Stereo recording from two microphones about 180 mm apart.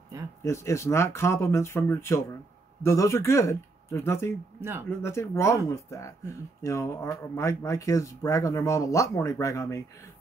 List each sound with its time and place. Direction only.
0.4 s speech: 15° left (ahead or behind)
4.6 s speech: 15° right (ahead or behind)
4.8 s speech: 15° left (ahead or behind)